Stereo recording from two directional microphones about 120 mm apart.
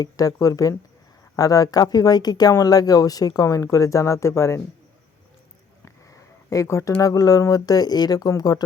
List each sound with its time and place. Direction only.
0.0 s speech: 30° left (ahead or behind)
5.8 s sniff: 25° left (ahead or behind)
7.0 s speech: 30° left (ahead or behind)